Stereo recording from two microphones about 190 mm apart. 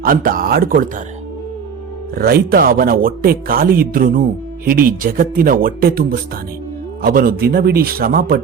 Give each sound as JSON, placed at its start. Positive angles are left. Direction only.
{"t": 0.0, "sound": "speech", "side_deg": -50}
{"t": 2.1, "sound": "speech", "side_deg": -55}